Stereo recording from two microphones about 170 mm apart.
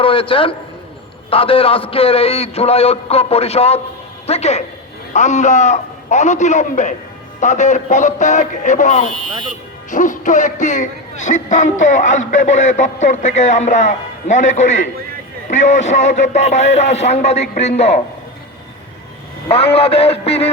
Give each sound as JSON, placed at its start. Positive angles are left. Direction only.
{"t": 0.0, "sound": "a man's voice", "side_deg": 30}
{"t": 19.5, "sound": "a man's voice", "side_deg": 35}